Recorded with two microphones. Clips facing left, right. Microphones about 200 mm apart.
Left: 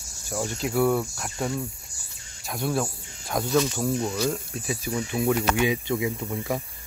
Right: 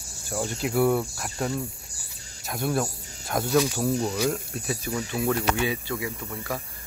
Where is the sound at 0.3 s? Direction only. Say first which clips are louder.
Even; centre (ahead or behind).